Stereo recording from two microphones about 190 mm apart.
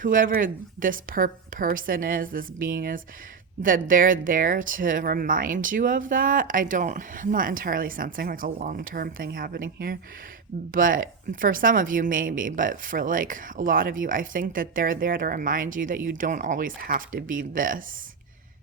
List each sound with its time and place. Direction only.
0.0 s speech: 45° right (ahead or behind)